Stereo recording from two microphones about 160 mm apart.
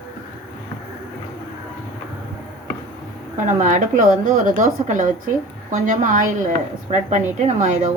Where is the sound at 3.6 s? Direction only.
55° right (ahead or behind).